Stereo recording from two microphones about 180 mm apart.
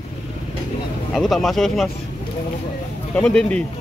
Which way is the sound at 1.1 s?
Centre (ahead or behind).